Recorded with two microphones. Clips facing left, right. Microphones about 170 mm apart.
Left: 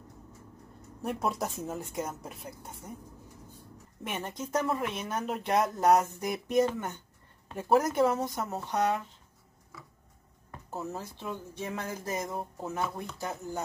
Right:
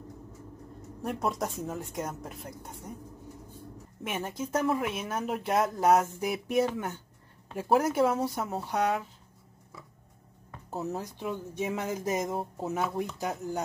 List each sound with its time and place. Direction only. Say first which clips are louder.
1.0 s speech: right 1 dB; centre (ahead or behind)
4.0 s speech: right 2 dB; 5° right (ahead or behind)
10.7 s speech: right 3 dB; centre (ahead or behind)
11.0 s speech: right 3 dB; 15° right (ahead or behind)